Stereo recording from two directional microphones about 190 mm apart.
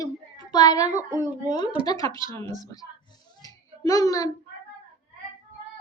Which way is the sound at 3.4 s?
20° left (ahead or behind).